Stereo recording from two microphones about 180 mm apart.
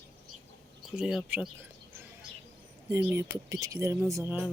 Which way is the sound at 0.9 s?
5° right (ahead or behind).